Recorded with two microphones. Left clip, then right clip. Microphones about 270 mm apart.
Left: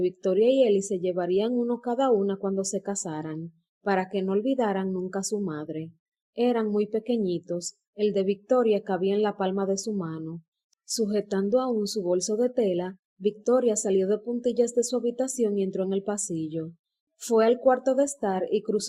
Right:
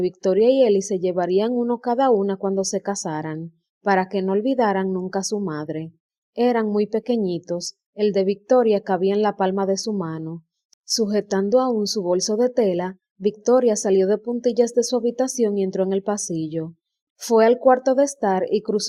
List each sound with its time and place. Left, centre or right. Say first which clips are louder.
0.2 s a woman's voice: right 6 dB; right